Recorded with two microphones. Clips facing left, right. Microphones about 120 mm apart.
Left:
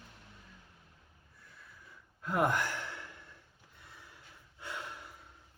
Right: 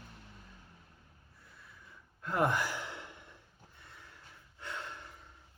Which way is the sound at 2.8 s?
20° right (ahead or behind).